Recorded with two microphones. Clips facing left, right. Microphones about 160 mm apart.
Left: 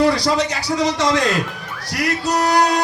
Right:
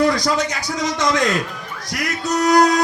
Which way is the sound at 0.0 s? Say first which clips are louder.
Left 1 dB; 30° left (ahead or behind).